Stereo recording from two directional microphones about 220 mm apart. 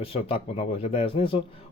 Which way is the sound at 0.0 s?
25° left (ahead or behind).